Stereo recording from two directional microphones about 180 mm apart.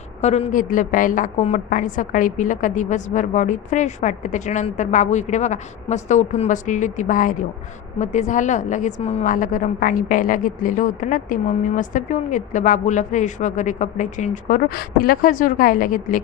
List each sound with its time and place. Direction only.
0.2 s a woman's voice: 40° left (ahead or behind)